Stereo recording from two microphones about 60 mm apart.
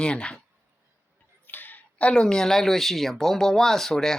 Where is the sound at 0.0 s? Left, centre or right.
Centre.